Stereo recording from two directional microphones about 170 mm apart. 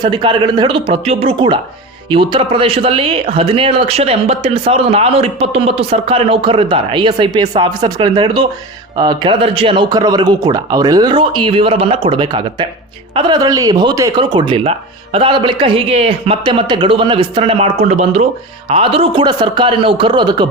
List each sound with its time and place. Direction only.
0.0 s speech: 30° right (ahead or behind)